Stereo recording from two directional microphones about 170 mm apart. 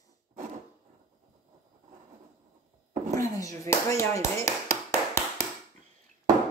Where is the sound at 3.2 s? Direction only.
20° left (ahead or behind).